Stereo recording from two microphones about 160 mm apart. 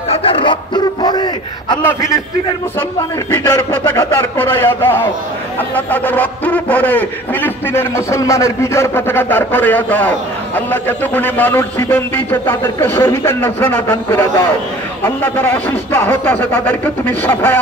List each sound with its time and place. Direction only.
0.1 s speech: 35° left (ahead or behind)
1.8 s speech: 15° left (ahead or behind)
3.4 s a man's voice: 20° left (ahead or behind)